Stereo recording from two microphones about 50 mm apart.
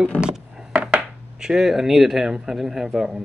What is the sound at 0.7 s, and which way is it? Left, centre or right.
Speech, centre.